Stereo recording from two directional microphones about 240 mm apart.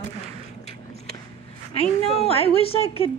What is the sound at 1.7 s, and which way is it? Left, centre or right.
A woman's voice, left.